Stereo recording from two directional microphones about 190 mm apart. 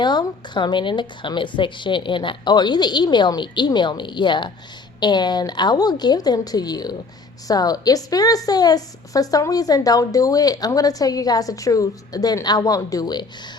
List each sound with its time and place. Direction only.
0.0 s a woman's voice: 25° left (ahead or behind)